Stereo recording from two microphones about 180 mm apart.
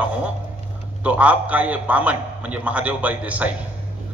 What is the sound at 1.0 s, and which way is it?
A man's voice, 10° right (ahead or behind).